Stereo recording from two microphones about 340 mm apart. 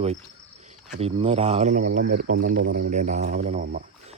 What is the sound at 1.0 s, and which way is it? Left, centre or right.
Speech, centre.